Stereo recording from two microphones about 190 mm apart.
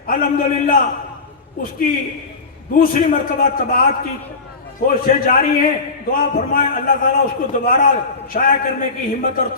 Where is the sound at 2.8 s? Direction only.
45° left (ahead or behind).